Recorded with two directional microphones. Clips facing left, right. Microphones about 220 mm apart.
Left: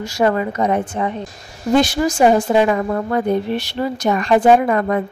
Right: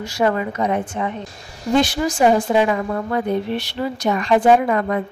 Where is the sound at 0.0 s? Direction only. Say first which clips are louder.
Left 2 dB; 40° left (ahead or behind).